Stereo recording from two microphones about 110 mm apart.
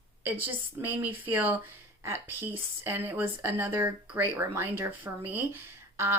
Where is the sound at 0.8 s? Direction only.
15° right (ahead or behind).